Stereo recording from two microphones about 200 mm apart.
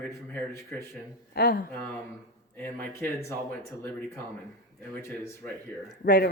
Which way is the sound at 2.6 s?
10° left (ahead or behind).